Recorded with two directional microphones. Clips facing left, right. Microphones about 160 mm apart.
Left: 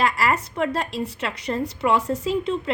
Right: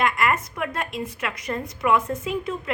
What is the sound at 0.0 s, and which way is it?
A woman's voice, 35° left (ahead or behind).